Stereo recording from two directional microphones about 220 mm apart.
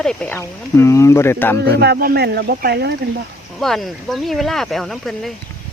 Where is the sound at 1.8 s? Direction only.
45° right (ahead or behind).